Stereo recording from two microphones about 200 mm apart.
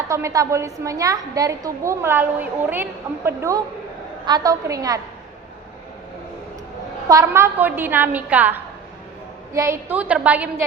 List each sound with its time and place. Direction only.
0.1 s a woman's voice: 15° right (ahead or behind)
7.1 s a woman's voice: 15° right (ahead or behind)